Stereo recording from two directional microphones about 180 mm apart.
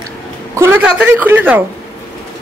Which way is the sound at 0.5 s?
10° right (ahead or behind).